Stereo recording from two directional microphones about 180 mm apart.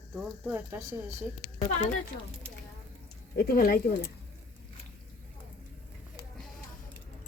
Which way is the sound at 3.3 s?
55° left (ahead or behind).